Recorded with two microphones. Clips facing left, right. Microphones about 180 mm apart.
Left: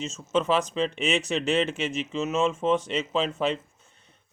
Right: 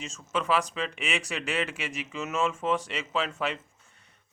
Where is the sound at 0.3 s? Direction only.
25° left (ahead or behind).